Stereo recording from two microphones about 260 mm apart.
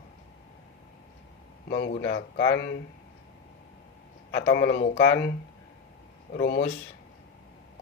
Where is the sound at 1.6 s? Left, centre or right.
Left.